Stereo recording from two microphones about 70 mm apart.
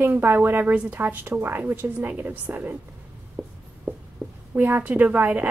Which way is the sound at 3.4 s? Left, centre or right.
Centre.